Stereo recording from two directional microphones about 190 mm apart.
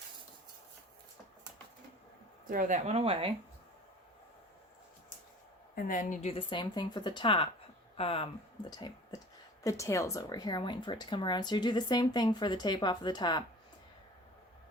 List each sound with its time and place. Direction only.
2.5 s speech: 45° right (ahead or behind)
5.7 s a woman's voice: 45° left (ahead or behind)
6.3 s speech: 25° left (ahead or behind)